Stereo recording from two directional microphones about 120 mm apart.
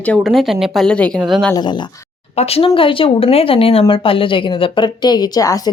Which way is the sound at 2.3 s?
55° left (ahead or behind).